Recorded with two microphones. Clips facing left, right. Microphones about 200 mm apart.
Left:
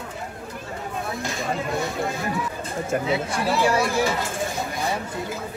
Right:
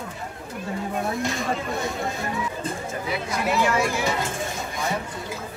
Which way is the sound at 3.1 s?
30° left (ahead or behind).